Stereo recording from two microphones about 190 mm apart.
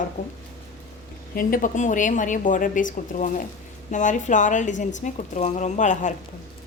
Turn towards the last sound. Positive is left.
turn(degrees=40)  # may be behind; listen again after turning